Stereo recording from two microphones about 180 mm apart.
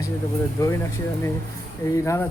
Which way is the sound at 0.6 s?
20° left (ahead or behind).